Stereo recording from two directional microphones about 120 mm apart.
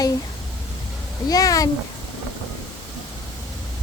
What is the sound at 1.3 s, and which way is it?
Speech, 30° left (ahead or behind).